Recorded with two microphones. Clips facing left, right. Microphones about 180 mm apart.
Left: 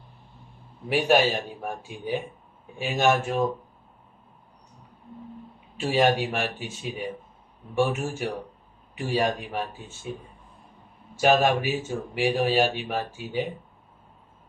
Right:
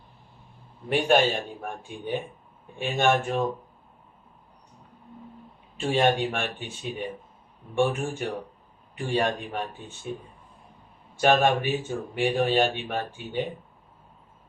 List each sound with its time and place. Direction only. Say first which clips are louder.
0.9 s speech: even; 5° left (ahead or behind)
5.8 s speech: left 1 dB; 5° left (ahead or behind)
11.2 s speech: even; 5° left (ahead or behind)